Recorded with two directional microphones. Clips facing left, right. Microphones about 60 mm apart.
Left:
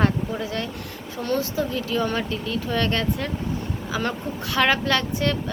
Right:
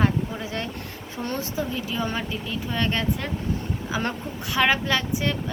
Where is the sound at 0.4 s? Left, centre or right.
Right.